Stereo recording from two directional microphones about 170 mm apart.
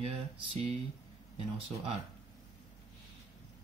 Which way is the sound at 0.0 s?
35° right (ahead or behind).